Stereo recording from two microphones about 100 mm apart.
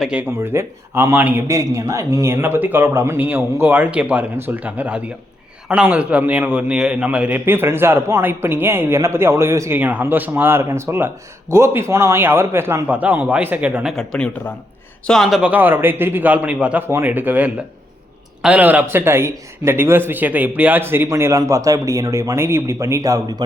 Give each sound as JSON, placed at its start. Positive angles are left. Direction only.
{"t": 0.0, "sound": "a man's voice", "side_deg": -10}
{"t": 0.3, "sound": "a man's voice", "side_deg": -25}
{"t": 1.5, "sound": "a man's voice", "side_deg": -30}
{"t": 9.7, "sound": "a man's voice", "side_deg": -20}
{"t": 13.9, "sound": "speech", "side_deg": 5}
{"t": 15.0, "sound": "speech", "side_deg": 0}
{"t": 15.4, "sound": "a man's voice", "side_deg": -15}